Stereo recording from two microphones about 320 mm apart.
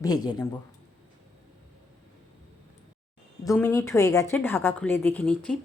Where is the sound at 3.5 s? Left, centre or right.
Centre.